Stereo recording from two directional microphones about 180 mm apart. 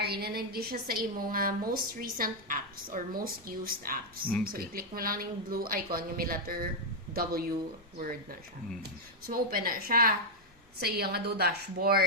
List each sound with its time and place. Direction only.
0.0 s a woman's voice: 60° right (ahead or behind)